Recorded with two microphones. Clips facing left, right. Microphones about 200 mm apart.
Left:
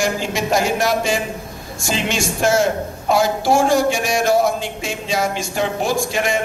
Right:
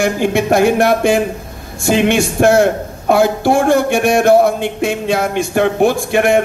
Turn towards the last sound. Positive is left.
turn(degrees=-60)  # may be behind; listen again after turning